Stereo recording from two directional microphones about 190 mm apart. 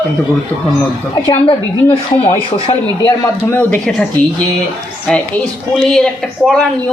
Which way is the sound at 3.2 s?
10° left (ahead or behind).